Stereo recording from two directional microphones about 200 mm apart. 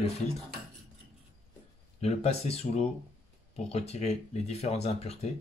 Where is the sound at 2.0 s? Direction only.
30° left (ahead or behind).